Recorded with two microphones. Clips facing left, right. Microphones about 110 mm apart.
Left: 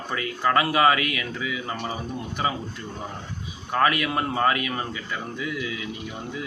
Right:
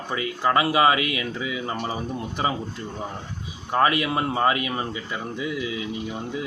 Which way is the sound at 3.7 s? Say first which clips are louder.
Right 1 dB; 25° right (ahead or behind).